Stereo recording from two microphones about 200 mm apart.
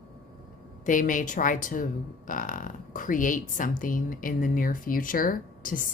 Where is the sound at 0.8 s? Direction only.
40° left (ahead or behind).